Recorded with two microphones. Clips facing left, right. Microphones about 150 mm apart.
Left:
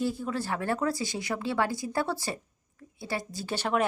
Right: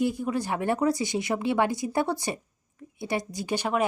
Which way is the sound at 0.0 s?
15° right (ahead or behind).